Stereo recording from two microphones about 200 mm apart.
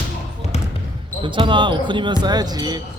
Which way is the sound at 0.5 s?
30° left (ahead or behind).